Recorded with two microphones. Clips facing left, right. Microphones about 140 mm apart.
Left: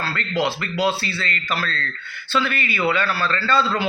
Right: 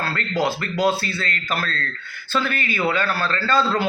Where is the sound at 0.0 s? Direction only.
45° right (ahead or behind).